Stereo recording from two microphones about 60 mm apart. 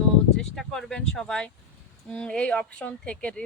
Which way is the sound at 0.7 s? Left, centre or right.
Centre.